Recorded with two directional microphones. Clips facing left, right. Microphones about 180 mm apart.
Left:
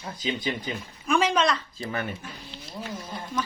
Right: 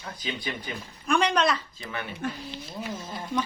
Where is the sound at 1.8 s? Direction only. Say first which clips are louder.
Left 5 dB; 40° left (ahead or behind).